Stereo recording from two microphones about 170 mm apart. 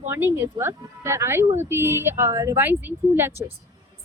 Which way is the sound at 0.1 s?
15° right (ahead or behind).